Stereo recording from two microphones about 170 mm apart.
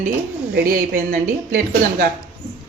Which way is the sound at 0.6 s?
55° right (ahead or behind).